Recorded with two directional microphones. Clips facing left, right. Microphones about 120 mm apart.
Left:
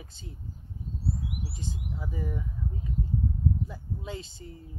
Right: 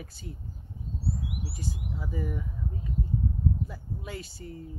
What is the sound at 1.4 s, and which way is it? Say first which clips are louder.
Speech: right 1 dB; 20° left (ahead or behind).